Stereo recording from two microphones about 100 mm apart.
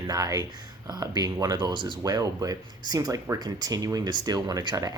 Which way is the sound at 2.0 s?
40° right (ahead or behind).